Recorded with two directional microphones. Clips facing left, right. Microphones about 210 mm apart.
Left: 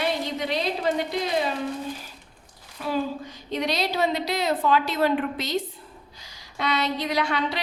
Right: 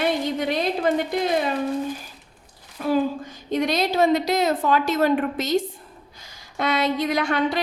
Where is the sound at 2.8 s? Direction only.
45° right (ahead or behind).